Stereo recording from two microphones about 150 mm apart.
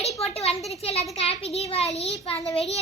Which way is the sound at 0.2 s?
40° left (ahead or behind).